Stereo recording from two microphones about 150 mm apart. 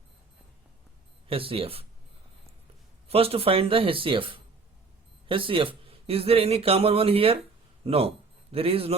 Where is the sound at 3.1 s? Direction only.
40° right (ahead or behind).